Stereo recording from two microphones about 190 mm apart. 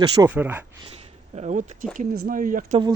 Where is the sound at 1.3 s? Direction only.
40° right (ahead or behind).